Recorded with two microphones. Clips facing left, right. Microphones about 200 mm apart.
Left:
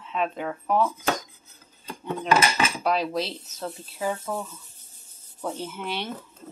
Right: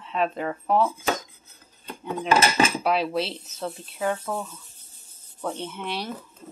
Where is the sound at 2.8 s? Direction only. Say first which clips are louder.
Right 1 dB; 5° right (ahead or behind).